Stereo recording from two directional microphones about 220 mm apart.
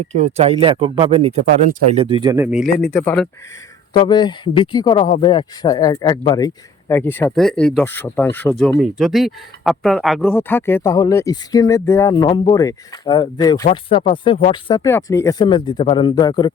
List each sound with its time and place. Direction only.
0.1 s speech: 30° right (ahead or behind); by 2.6 s 5° right (ahead or behind)
2.9 s speech: 10° left (ahead or behind)
3.9 s speech: 20° left (ahead or behind)
8.8 s speech: centre (ahead or behind); by 16.5 s 20° left (ahead or behind)